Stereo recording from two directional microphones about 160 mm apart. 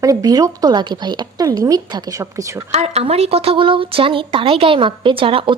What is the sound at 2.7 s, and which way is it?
Speech, 40° right (ahead or behind).